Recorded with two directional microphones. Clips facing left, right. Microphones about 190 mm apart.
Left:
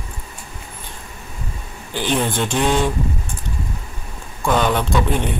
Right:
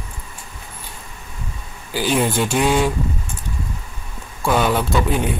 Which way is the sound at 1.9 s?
5° right (ahead or behind).